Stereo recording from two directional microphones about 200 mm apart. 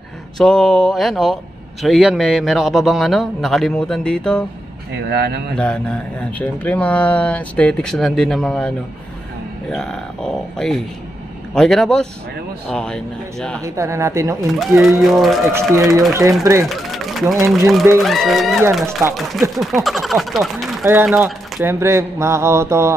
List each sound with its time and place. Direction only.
0.4 s a man's voice: 5° left (ahead or behind)
5.0 s speech: 55° right (ahead or behind)
6.3 s a man's voice: 5° left (ahead or behind)
13.6 s speech: 15° right (ahead or behind)
14.5 s a man's voice: centre (ahead or behind)
15.7 s speech: 15° right (ahead or behind)
16.6 s a man's voice: centre (ahead or behind)